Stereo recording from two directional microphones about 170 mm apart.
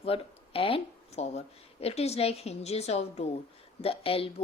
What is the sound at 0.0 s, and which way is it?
Speech, 35° left (ahead or behind).